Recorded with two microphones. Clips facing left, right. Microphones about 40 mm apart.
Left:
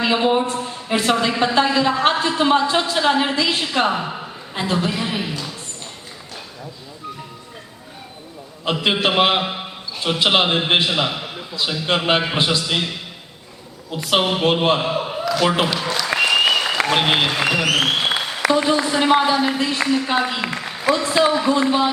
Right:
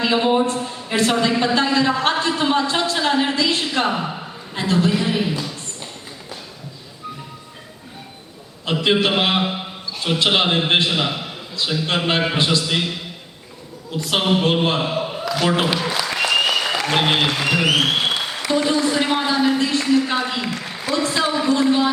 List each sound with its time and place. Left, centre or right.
0.0 s a man's voice: centre
8.6 s a man's voice: centre
13.9 s a man's voice: centre
15.7 s applause: centre
16.0 s applause: centre
16.8 s a woman's voice: centre
17.6 s applause: centre
18.5 s a man's voice: centre
20.4 s a sound: centre
20.9 s a woman's voice: centre